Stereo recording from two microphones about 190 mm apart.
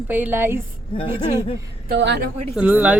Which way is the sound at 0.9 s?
30° left (ahead or behind).